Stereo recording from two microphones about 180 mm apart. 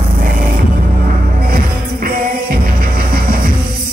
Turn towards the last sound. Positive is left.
turn(degrees=-55)  # may be behind; listen again after turning